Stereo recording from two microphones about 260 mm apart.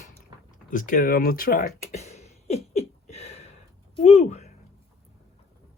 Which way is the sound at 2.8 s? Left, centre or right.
Left.